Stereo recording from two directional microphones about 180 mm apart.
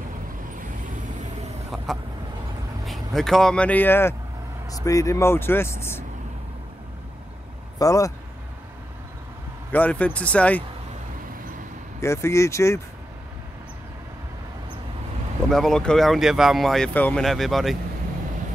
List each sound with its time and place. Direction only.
2.8 s speech: centre (ahead or behind)
7.8 s speech: 20° left (ahead or behind)
9.7 s speech: 10° left (ahead or behind)
12.0 s speech: 15° left (ahead or behind)
15.5 s speech: 5° left (ahead or behind)